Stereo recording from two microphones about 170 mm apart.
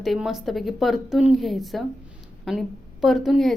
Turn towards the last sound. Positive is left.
turn(degrees=0)  # may be behind; listen again after turning